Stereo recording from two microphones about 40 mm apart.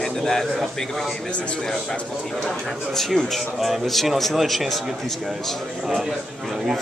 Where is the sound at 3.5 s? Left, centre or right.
Centre.